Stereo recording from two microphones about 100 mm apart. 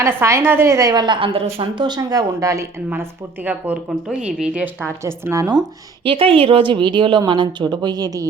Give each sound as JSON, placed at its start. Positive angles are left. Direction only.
{"t": 0.0, "sound": "a woman's voice", "side_deg": -25}
{"t": 1.7, "sound": "a woman's voice", "side_deg": -45}
{"t": 2.9, "sound": "speech", "side_deg": -15}
{"t": 5.0, "sound": "speech", "side_deg": -25}
{"t": 6.1, "sound": "a woman's voice", "side_deg": -65}